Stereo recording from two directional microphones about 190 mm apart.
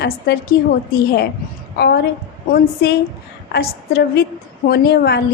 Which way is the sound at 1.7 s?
55° left (ahead or behind).